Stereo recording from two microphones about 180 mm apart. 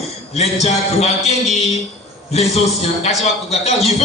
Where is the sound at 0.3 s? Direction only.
35° left (ahead or behind).